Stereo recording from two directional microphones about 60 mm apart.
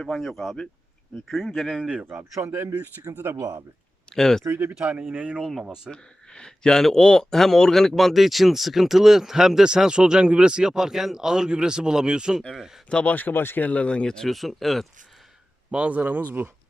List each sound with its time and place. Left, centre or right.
0.0 s speech: centre
2.4 s speech: right
2.6 s speech: right
4.1 s speech: centre
4.8 s speech: right
5.4 s speech: centre
5.6 s speech: centre
5.9 s speech: centre
13.1 s speech: left
13.7 s speech: left; by 14.8 s centre
15.7 s speech: right